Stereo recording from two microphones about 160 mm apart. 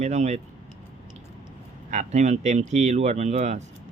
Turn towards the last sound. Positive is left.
turn(degrees=-45)  # may be behind; listen again after turning